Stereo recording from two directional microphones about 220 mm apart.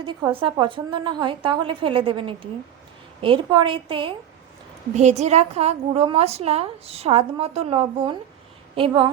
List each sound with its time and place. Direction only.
0.0 s a woman's voice: 20° right (ahead or behind)